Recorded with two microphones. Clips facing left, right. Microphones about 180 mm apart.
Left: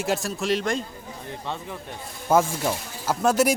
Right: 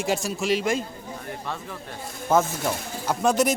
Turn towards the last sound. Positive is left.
turn(degrees=5)  # may be behind; listen again after turning